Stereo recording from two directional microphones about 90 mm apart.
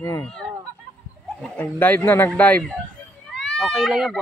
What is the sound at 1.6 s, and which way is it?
Speech, 20° left (ahead or behind).